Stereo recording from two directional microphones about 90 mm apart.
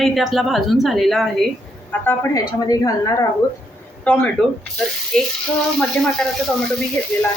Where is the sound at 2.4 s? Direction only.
45° left (ahead or behind).